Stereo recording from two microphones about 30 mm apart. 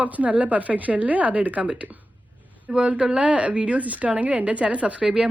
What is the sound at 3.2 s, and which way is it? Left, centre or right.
Speech, right.